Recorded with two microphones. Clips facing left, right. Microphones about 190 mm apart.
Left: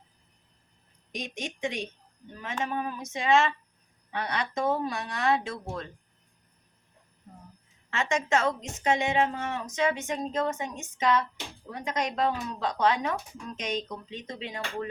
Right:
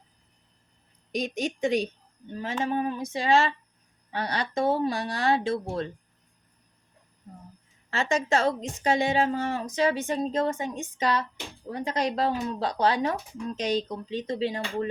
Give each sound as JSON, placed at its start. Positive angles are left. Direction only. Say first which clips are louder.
{"t": 1.1, "sound": "a woman's voice", "louder": "right 8 dB", "side_deg": -40}
{"t": 7.9, "sound": "a woman's voice", "louder": "right 2 dB", "side_deg": -35}